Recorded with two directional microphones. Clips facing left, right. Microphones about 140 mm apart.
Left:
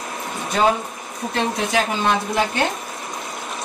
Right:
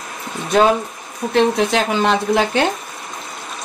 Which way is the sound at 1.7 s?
75° right (ahead or behind).